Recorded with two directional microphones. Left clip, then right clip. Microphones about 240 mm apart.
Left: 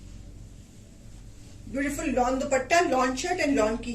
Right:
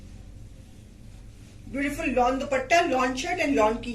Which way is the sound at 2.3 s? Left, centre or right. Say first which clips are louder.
Right 1 dB; centre.